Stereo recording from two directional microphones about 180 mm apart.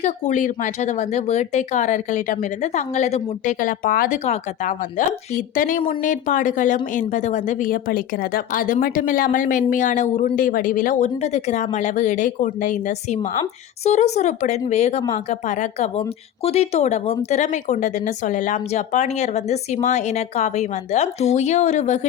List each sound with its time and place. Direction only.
0.0 s speech: 40° left (ahead or behind)
4.2 s speech: 40° left (ahead or behind)